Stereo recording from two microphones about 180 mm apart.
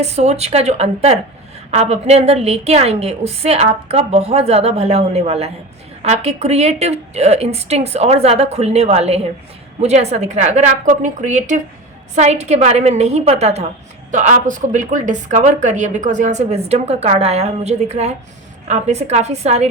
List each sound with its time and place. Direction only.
0.0 s speech: 35° right (ahead or behind)